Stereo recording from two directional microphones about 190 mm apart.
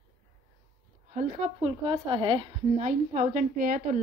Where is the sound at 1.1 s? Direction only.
40° right (ahead or behind).